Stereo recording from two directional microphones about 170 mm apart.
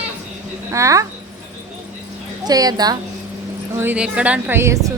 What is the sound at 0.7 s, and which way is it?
Speech, 20° right (ahead or behind).